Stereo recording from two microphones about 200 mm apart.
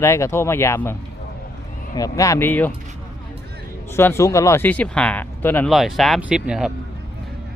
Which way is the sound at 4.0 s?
10° left (ahead or behind).